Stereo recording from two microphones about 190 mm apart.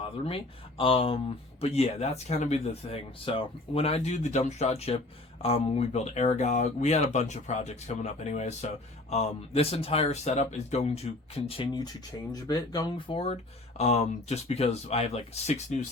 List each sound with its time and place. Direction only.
0.0 s speech: 30° left (ahead or behind)